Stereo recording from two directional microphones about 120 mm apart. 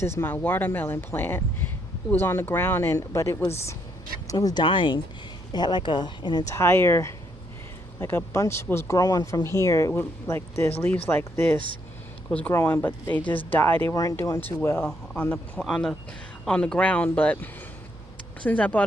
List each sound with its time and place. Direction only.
0.0 s speech: 20° left (ahead or behind); by 6.4 s 40° left (ahead or behind)
6.5 s speech: 20° left (ahead or behind)
9.0 s speech: 30° left (ahead or behind)
15.5 s speech: 5° left (ahead or behind)